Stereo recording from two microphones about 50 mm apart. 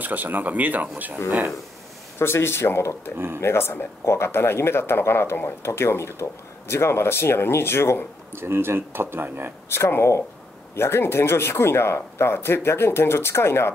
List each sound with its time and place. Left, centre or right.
0.0 s speech: right
2.1 s speech: left
8.3 s speech: right
9.8 s speech: left